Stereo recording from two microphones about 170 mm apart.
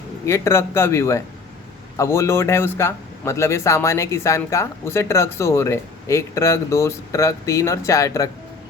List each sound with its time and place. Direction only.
0.3 s speech: 15° left (ahead or behind)